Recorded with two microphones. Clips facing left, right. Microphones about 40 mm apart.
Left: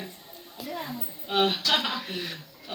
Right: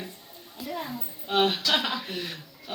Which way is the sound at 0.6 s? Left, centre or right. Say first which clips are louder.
Right 1 dB; centre.